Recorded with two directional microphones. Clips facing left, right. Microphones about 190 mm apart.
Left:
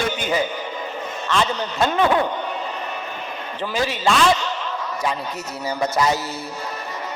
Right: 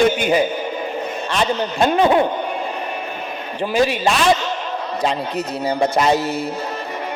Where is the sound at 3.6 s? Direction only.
15° right (ahead or behind).